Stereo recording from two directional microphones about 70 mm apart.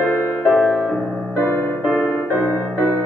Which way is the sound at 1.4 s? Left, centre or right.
Centre.